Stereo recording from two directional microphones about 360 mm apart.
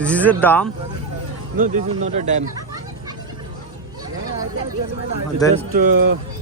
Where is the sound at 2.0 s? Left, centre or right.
Centre.